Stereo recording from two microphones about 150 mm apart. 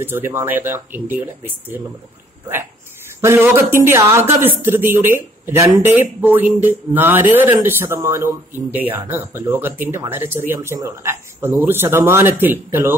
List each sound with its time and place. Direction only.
0.0 s speech: 15° right (ahead or behind)
3.2 s speech: 15° right (ahead or behind)